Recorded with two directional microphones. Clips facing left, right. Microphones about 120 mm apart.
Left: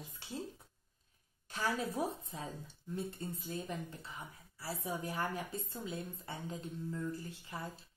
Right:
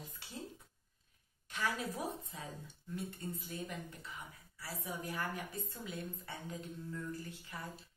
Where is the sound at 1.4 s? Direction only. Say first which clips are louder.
Left 2 dB; 35° left (ahead or behind).